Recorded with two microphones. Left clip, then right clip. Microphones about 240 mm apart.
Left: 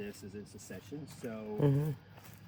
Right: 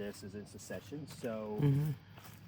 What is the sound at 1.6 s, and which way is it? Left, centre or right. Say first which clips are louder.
Speech: left 4 dB; centre.